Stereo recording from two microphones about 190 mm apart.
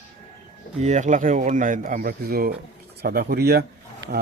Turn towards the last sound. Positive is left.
turn(degrees=-55)  # may be behind; listen again after turning